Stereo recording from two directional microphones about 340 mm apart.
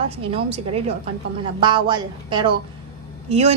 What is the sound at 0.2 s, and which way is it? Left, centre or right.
A woman's voice, centre.